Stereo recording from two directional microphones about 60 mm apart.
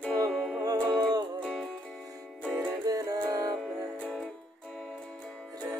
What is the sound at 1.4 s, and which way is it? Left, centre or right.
Music, centre.